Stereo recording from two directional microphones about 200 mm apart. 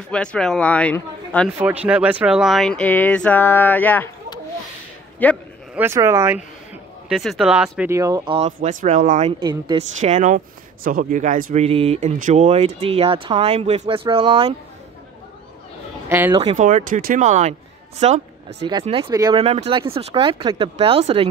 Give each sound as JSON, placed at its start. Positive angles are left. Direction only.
{"t": 0.1, "sound": "a man's voice", "side_deg": 5}
{"t": 1.9, "sound": "speech", "side_deg": -5}
{"t": 5.2, "sound": "speech", "side_deg": 10}
{"t": 5.8, "sound": "speech", "side_deg": -15}
{"t": 7.1, "sound": "a man's voice", "side_deg": 0}
{"t": 7.9, "sound": "speech", "side_deg": -15}
{"t": 8.4, "sound": "speech", "side_deg": -40}
{"t": 9.4, "sound": "speech", "side_deg": -20}
{"t": 9.9, "sound": "speech", "side_deg": -35}
{"t": 11.6, "sound": "speech", "side_deg": -30}
{"t": 16.1, "sound": "speech", "side_deg": -10}
{"t": 16.5, "sound": "speech", "side_deg": -40}
{"t": 18.7, "sound": "speech", "side_deg": -25}
{"t": 19.4, "sound": "speech", "side_deg": -30}